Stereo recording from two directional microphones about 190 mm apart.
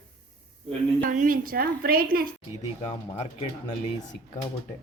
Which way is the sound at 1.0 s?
45° right (ahead or behind).